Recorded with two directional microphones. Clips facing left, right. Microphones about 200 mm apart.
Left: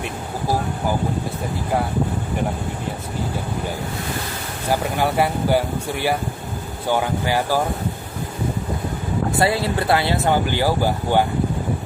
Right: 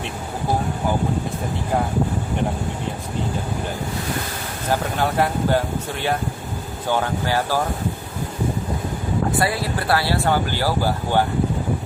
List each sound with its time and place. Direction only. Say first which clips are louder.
4.7 s speech: left 1 dB; 10° left (ahead or behind)
9.4 s speech: left 3 dB; 25° left (ahead or behind)